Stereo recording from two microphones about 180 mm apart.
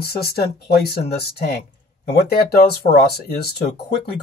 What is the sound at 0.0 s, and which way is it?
Speech, 60° left (ahead or behind).